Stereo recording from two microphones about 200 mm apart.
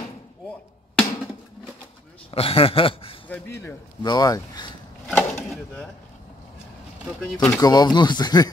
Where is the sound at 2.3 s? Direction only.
30° left (ahead or behind).